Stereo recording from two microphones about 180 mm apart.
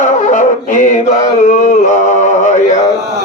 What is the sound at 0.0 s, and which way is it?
Music, 40° left (ahead or behind).